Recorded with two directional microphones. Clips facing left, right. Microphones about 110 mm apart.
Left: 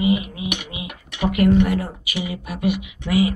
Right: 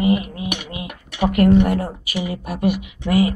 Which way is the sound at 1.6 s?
35° right (ahead or behind).